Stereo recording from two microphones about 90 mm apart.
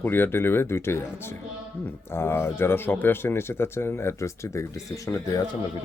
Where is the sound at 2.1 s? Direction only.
25° left (ahead or behind).